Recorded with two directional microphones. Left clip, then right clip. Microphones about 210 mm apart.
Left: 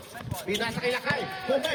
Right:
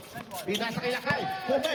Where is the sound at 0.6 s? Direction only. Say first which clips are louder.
Left 4 dB; 30° left (ahead or behind).